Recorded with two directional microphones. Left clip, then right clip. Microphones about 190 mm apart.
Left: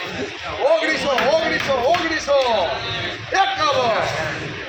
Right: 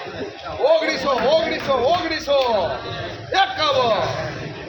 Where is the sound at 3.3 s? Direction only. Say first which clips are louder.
Even; 35° right (ahead or behind).